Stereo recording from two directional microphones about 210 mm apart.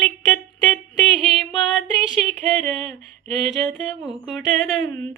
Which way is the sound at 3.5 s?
Centre (ahead or behind).